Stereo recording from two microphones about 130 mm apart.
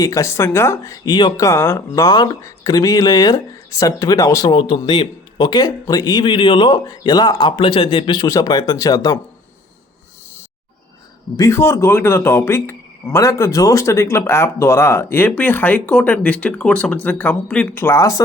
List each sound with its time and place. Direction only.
0.0 s speech: 25° left (ahead or behind)
1.5 s speech: 20° left (ahead or behind)
2.0 s speech: 30° left (ahead or behind)
4.5 s speech: 35° left (ahead or behind)
11.3 s speech: 20° left (ahead or behind)